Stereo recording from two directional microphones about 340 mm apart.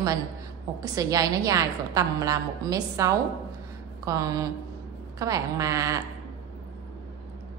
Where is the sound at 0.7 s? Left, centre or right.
Centre.